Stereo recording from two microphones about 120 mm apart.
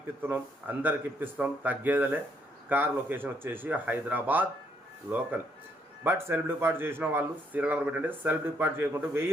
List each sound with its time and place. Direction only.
0.2 s a man's voice: 15° right (ahead or behind)
6.0 s a man's voice: 20° right (ahead or behind)